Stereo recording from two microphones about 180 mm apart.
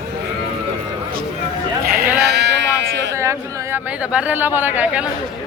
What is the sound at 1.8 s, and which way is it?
Sheep, 55° right (ahead or behind).